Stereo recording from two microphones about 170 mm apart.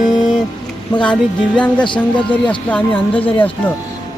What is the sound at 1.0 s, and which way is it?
Music, 5° left (ahead or behind).